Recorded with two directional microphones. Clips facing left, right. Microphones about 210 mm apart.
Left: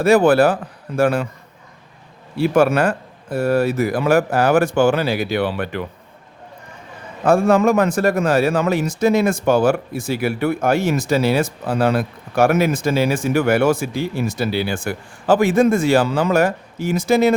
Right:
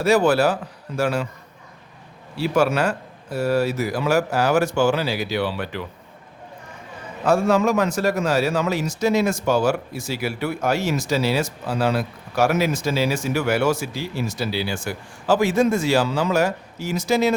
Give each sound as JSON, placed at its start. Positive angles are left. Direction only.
{"t": 0.0, "sound": "a man's voice", "side_deg": 55}
{"t": 2.3, "sound": "a man's voice", "side_deg": 55}
{"t": 7.3, "sound": "a man's voice", "side_deg": 55}